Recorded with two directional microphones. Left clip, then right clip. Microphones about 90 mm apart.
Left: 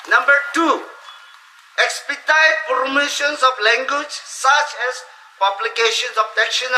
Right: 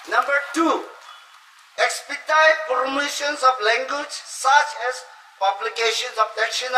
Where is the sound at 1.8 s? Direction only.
20° left (ahead or behind).